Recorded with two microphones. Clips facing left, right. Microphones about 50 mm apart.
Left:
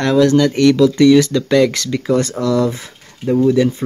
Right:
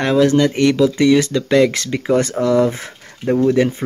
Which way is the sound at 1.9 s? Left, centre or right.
Right.